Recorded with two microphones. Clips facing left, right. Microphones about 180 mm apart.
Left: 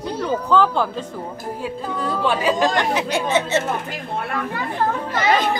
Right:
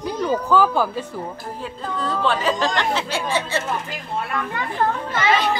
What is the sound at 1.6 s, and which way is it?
Speech, 10° left (ahead or behind).